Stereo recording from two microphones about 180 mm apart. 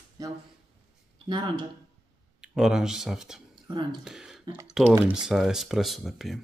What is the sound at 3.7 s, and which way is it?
Speech, 25° right (ahead or behind).